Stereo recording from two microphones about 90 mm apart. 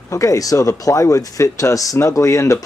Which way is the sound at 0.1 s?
40° left (ahead or behind).